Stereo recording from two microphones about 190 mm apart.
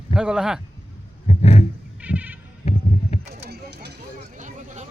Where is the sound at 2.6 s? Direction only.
35° left (ahead or behind).